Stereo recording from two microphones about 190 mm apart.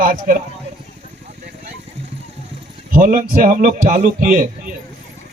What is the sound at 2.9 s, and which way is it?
A man's voice, 45° right (ahead or behind).